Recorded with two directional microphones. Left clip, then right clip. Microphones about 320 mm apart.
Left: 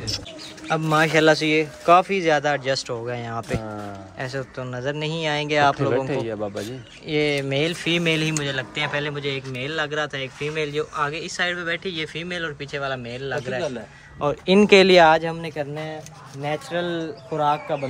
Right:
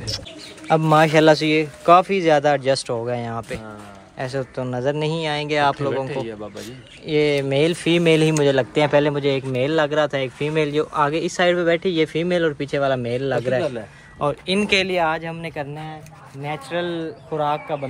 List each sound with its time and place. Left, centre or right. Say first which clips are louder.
0.7 s speech: right 5 dB; centre
6.0 s speech: left 2 dB; left
7.1 s speech: right 3 dB; centre
14.4 s speech: left 7 dB; centre
15.4 s speech: left 1 dB; centre